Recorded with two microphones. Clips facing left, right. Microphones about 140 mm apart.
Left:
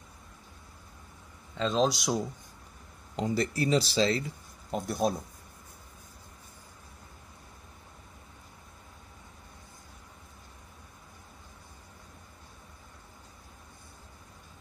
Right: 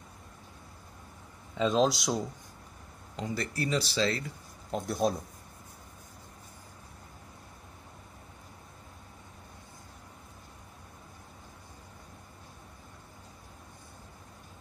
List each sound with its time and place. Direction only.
1.6 s speech: 5° right (ahead or behind)
3.2 s speech: 25° left (ahead or behind)
4.6 s speech: centre (ahead or behind)